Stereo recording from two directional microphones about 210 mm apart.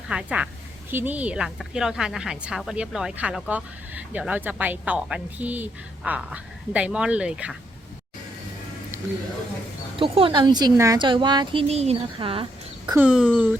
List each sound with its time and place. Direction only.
0.1 s a woman's voice: 5° right (ahead or behind)
10.0 s a woman's voice: 25° right (ahead or behind)
13.0 s a woman's voice: 5° right (ahead or behind)